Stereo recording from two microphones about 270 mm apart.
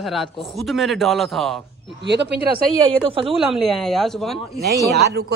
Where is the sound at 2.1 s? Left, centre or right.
Right.